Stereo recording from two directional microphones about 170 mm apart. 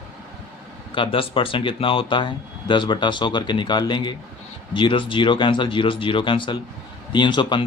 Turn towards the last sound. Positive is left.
turn(degrees=30)  # may be behind; listen again after turning